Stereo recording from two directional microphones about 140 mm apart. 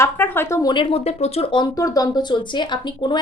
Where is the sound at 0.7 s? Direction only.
40° left (ahead or behind).